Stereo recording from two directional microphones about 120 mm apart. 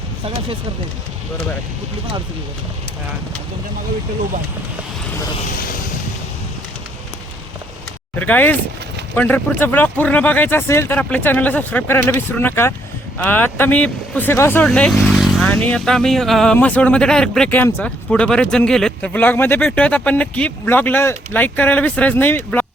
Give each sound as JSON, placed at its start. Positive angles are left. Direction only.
{"t": 8.1, "sound": "speech", "side_deg": 15}
{"t": 14.6, "sound": "speech", "side_deg": 10}